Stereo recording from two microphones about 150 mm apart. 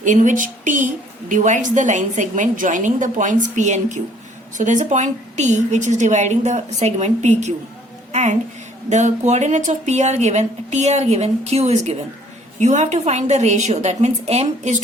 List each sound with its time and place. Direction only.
0.0 s a woman's voice: 55° right (ahead or behind)